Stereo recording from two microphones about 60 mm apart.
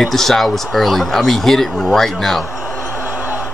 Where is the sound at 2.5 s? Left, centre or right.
Left.